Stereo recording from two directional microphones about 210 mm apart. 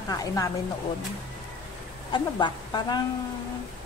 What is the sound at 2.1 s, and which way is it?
Speech, 20° left (ahead or behind).